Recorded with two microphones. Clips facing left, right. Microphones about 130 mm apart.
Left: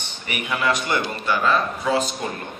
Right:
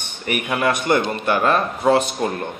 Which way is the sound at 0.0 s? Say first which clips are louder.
Right 6 dB; 50° right (ahead or behind).